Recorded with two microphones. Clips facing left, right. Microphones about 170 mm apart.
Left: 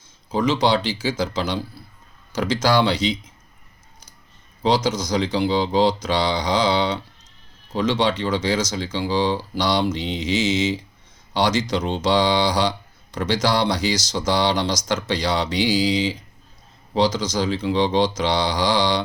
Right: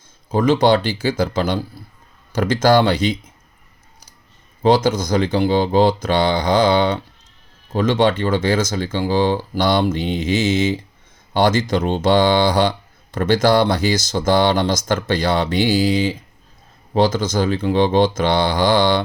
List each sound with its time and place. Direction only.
0.3 s speech: 55° right (ahead or behind)
4.6 s speech: 55° right (ahead or behind)